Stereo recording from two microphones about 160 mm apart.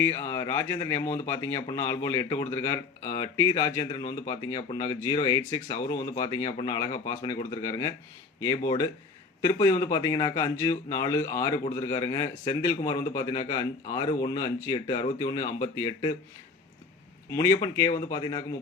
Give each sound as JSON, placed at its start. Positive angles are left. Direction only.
{"t": 0.0, "sound": "speech", "side_deg": 15}
{"t": 0.9, "sound": "speech", "side_deg": 45}
{"t": 1.3, "sound": "speech", "side_deg": 15}
{"t": 17.3, "sound": "speech", "side_deg": 20}